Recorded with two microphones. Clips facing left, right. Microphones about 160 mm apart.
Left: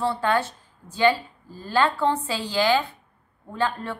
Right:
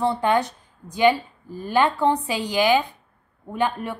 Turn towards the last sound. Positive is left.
turn(degrees=-15)  # may be behind; listen again after turning